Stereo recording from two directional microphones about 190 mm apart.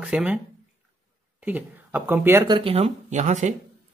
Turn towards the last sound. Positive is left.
turn(degrees=-40)  # may be behind; listen again after turning